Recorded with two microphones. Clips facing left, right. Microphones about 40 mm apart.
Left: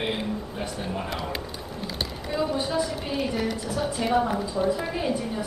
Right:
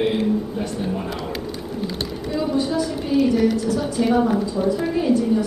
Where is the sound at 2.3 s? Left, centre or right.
Centre.